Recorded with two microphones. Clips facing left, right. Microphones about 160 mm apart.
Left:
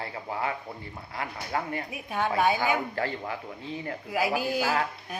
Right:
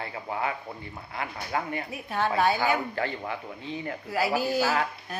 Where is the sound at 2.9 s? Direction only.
35° left (ahead or behind).